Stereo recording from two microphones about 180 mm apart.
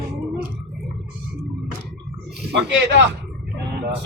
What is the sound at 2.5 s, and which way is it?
Speech, 80° right.